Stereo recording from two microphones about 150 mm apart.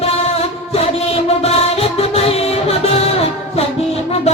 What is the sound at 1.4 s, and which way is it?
Music, 40° left (ahead or behind).